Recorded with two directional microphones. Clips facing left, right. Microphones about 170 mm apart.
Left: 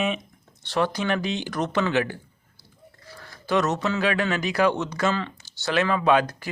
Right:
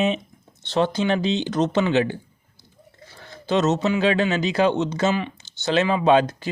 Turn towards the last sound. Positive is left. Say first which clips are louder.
# right 3 dB
turn(degrees=-25)  # may be behind; listen again after turning